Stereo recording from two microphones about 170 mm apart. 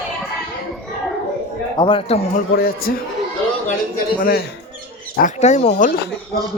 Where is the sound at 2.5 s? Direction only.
60° left (ahead or behind).